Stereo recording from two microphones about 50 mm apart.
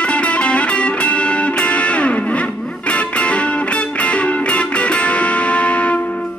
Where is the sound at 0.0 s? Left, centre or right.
Left.